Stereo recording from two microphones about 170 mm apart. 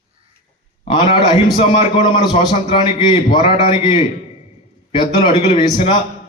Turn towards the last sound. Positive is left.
turn(degrees=30)  # may be behind; listen again after turning